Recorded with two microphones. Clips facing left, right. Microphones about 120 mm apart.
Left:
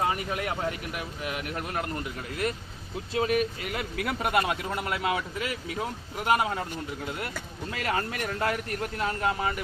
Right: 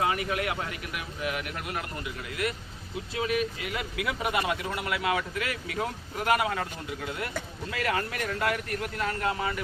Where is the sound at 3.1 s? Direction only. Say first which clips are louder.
Left 3 dB; 40° left (ahead or behind).